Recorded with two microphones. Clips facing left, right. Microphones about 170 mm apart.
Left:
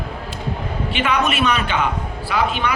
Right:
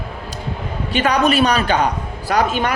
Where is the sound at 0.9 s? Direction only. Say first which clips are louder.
Right 5 dB; 40° right (ahead or behind).